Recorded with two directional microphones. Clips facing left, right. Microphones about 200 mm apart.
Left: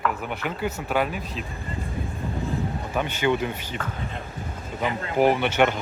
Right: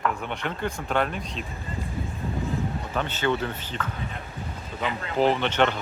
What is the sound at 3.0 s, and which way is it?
Speech, 10° left (ahead or behind).